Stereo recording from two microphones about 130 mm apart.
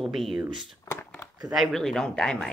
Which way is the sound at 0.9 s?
30° left (ahead or behind).